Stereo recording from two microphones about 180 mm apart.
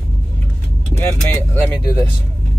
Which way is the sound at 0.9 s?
10° left (ahead or behind).